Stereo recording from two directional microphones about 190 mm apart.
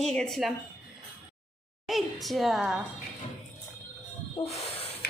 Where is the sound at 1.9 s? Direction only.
Centre (ahead or behind).